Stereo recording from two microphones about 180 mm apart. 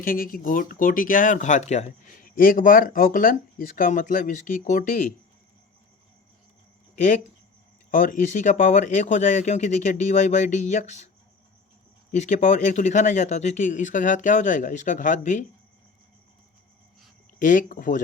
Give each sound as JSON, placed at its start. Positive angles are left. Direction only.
{"t": 0.0, "sound": "speech", "side_deg": 50}
{"t": 6.9, "sound": "speech", "side_deg": 45}
{"t": 12.1, "sound": "speech", "side_deg": 40}
{"t": 17.4, "sound": "speech", "side_deg": 45}